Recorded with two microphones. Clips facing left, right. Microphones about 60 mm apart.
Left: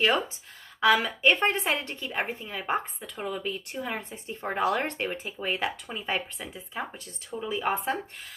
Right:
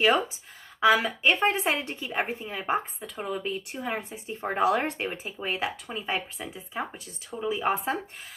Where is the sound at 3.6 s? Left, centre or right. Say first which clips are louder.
Right 1 dB; centre.